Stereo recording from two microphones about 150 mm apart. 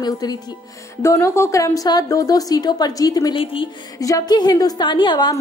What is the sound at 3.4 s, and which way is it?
Speech, 35° left (ahead or behind).